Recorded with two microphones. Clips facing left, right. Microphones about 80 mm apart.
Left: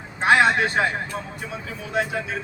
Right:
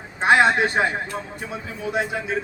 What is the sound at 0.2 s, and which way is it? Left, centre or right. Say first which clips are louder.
Speech: right 1 dB; right.